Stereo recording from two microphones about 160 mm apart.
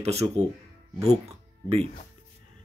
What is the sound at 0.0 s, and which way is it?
Speech, 40° right (ahead or behind).